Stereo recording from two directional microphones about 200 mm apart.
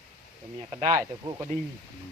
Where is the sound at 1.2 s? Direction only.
15° right (ahead or behind).